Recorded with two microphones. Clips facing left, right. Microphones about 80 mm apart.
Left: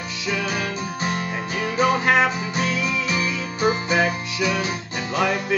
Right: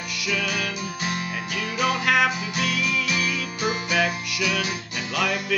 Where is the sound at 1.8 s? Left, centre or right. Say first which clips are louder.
Left 3 dB; left.